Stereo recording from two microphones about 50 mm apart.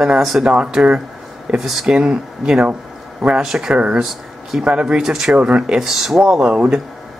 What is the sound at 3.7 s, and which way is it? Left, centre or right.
Speech, right.